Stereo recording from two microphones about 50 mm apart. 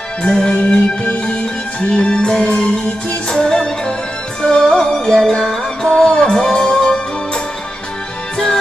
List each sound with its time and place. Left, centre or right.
0.2 s music: centre